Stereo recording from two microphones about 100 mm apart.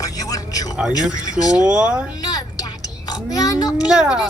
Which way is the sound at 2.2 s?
40° left (ahead or behind).